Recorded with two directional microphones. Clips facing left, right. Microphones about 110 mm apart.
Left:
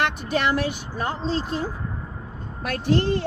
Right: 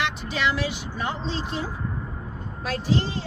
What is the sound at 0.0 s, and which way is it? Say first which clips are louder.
Speech: left 3 dB; 50° left (ahead or behind).